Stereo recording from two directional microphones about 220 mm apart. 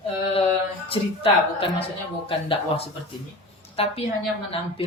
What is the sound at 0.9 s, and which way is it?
A man's voice, 25° left (ahead or behind).